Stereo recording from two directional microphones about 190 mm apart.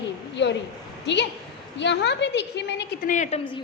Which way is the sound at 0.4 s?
65° left (ahead or behind).